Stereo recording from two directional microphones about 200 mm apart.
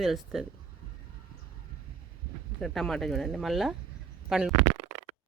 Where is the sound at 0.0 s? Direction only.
Centre (ahead or behind).